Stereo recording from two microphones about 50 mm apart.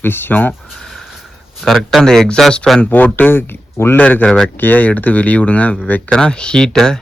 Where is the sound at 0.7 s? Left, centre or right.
Centre.